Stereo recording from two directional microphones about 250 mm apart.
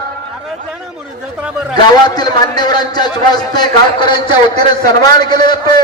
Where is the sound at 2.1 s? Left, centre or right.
Centre.